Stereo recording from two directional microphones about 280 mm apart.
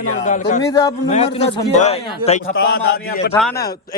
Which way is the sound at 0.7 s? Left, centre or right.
Centre.